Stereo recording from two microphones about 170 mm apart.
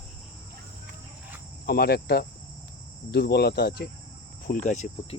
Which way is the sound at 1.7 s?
70° left (ahead or behind).